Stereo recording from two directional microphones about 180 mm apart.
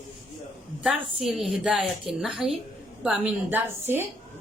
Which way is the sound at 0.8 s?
Centre (ahead or behind).